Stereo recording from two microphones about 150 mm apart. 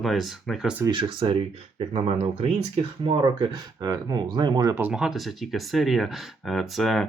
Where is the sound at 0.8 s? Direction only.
35° right (ahead or behind).